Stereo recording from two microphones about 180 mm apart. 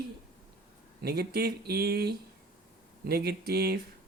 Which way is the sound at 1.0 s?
60° right (ahead or behind).